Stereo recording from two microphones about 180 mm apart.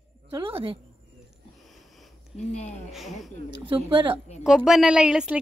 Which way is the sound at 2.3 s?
40° left (ahead or behind).